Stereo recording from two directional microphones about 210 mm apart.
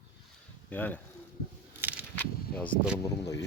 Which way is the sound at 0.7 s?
10° left (ahead or behind).